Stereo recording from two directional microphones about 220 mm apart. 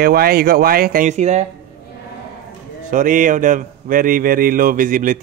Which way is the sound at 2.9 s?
35° right (ahead or behind).